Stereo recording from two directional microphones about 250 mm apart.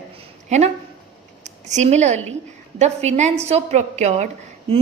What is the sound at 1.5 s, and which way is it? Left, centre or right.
A woman's voice, right.